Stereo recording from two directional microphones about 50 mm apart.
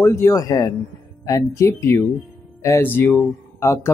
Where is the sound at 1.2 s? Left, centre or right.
Left.